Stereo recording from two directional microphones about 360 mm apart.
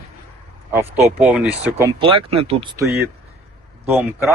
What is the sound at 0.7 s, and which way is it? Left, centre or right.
Speech, centre.